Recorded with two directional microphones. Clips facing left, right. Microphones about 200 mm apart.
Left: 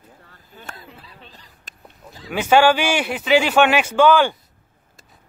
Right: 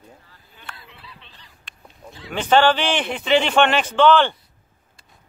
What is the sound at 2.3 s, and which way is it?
Speech, 10° left (ahead or behind).